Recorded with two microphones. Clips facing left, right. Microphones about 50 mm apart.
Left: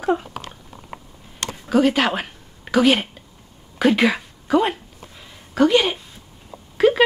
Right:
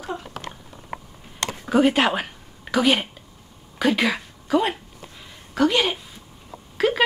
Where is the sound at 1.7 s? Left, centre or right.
Centre.